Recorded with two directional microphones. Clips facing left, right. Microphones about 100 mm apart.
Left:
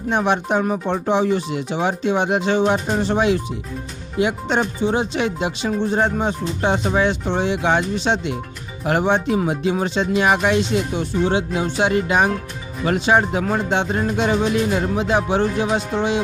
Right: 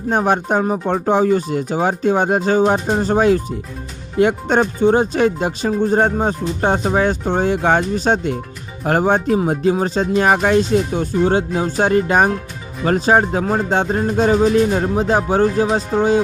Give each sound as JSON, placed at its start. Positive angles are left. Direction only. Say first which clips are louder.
{"t": 0.1, "sound": "speech", "louder": "right 2 dB", "side_deg": -40}